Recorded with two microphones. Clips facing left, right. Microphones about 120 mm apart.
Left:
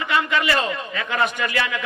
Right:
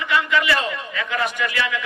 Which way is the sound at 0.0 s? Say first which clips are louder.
Right 1 dB; 30° left (ahead or behind).